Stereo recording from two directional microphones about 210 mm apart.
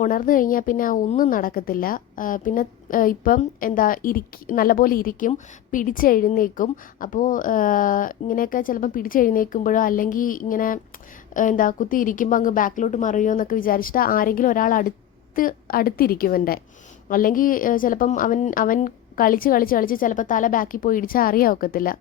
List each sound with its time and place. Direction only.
0.0 s a woman's voice: 40° left (ahead or behind)